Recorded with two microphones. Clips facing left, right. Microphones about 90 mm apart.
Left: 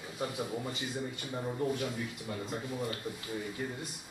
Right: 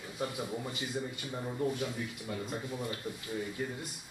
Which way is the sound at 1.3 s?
10° left (ahead or behind).